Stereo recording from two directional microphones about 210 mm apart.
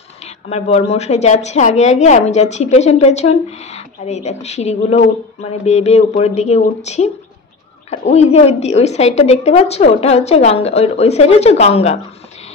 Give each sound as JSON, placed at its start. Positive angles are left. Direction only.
{"t": 0.2, "sound": "speech", "side_deg": 30}